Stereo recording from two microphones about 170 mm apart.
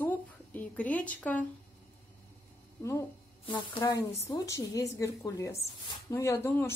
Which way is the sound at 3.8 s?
20° left (ahead or behind).